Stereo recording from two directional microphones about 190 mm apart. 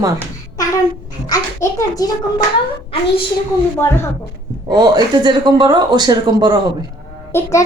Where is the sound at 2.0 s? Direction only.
20° left (ahead or behind).